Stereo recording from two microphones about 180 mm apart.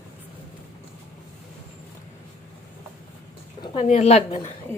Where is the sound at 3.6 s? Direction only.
35° left (ahead or behind).